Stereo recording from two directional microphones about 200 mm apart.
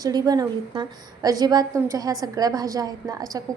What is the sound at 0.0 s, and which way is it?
A woman's voice, 20° right (ahead or behind).